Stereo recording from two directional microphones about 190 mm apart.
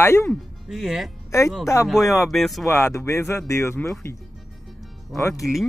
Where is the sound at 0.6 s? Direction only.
Centre (ahead or behind).